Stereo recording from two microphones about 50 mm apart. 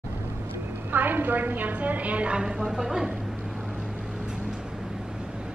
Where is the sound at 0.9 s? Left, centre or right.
Right; by 3.1 s centre.